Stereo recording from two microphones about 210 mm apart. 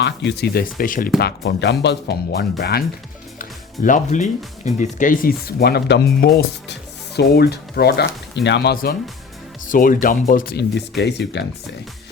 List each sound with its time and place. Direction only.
0.0 s speech: 55° left (ahead or behind); by 1.1 s 40° left (ahead or behind)
1.2 s speech: 55° left (ahead or behind)
3.8 s speech: 35° left (ahead or behind); by 11.4 s 55° left (ahead or behind)